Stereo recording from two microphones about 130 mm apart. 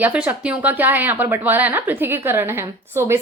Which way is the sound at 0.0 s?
10° right (ahead or behind).